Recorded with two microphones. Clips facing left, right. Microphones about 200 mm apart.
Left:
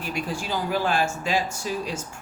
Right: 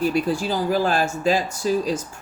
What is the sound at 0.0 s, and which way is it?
Speech, 35° right (ahead or behind).